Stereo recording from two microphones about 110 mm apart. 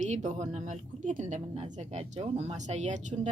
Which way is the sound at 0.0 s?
90° right.